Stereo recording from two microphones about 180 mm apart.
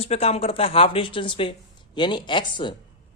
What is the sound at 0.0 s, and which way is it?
Speech, 35° left (ahead or behind).